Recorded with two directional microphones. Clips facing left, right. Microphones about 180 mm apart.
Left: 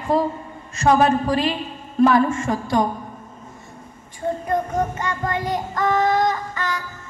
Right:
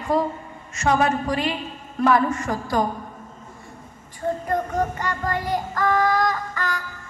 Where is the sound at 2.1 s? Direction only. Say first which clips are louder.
Even; 25° left (ahead or behind).